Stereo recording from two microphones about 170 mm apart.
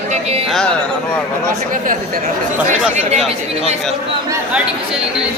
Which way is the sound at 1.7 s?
55° right (ahead or behind).